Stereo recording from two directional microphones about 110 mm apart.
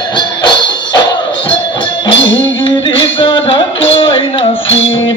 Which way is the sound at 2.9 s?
50° left (ahead or behind).